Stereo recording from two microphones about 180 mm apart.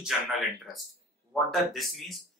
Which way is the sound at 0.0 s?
Centre (ahead or behind).